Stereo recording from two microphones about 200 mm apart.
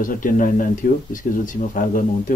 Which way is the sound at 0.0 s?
45° left (ahead or behind).